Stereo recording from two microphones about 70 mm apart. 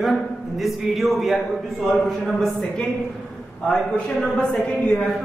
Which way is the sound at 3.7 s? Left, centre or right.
Centre.